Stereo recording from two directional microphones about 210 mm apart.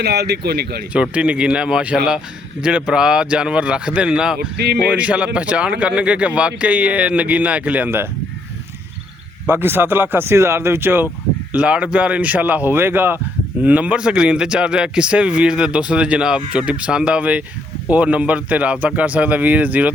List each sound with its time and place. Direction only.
0.0 s a man's voice: 50° right (ahead or behind)
0.9 s speech: 5° right (ahead or behind)
4.4 s a man's voice: 50° right (ahead or behind)
4.9 s speech: 5° right (ahead or behind)
9.5 s speech: 10° right (ahead or behind)